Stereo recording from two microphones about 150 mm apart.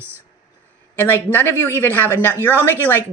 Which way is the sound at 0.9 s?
15° left (ahead or behind).